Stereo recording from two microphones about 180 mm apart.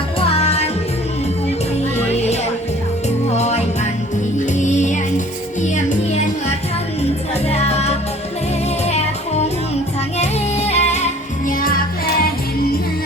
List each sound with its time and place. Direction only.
0.2 s music: 35° left (ahead or behind)
3.2 s music: 40° left (ahead or behind)
7.4 s music: 35° left (ahead or behind)
11.4 s music: 50° left (ahead or behind)